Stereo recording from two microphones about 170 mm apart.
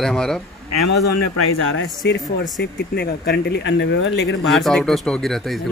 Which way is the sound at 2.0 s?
75° left (ahead or behind).